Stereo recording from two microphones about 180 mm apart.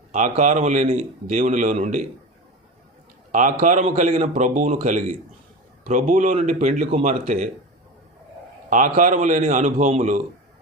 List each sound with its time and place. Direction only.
0.1 s a man's voice: 45° right (ahead or behind)
3.3 s a man's voice: 45° right (ahead or behind)
6.7 s speech: 35° right (ahead or behind)
8.7 s a man's voice: 45° right (ahead or behind)